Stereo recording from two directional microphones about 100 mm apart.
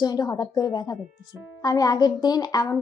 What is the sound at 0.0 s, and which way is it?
A woman's voice, 40° left (ahead or behind).